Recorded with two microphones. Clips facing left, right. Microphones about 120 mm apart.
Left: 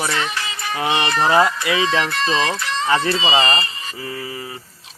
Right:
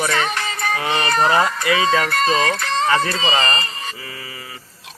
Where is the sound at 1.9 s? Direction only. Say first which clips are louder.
Right 2 dB; 45° right (ahead or behind).